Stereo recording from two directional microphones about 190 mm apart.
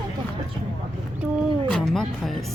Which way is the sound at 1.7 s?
Centre (ahead or behind).